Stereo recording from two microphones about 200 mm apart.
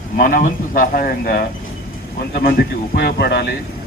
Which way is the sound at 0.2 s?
45° left (ahead or behind).